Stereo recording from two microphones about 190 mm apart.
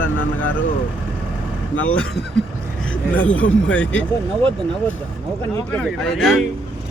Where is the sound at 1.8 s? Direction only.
5° left (ahead or behind).